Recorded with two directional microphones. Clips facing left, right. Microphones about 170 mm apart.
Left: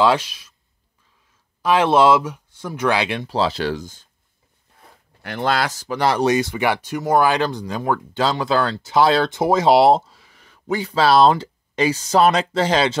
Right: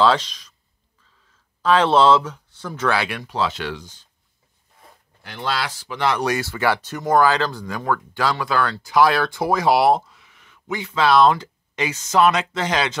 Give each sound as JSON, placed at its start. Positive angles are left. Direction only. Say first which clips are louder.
{"t": 0.0, "sound": "speech", "louder": "left 1 dB", "side_deg": 10}
{"t": 1.6, "sound": "speech", "louder": "left 1 dB", "side_deg": 10}
{"t": 5.2, "sound": "speech", "louder": "left 5 dB", "side_deg": 55}
{"t": 6.2, "sound": "speech", "louder": "left 3 dB", "side_deg": 20}